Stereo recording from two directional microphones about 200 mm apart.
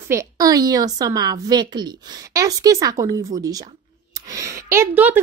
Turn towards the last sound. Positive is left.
turn(degrees=-10)  # may be behind; listen again after turning